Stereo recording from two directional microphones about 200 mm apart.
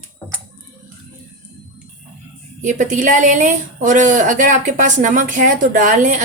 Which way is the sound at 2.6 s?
40° right (ahead or behind).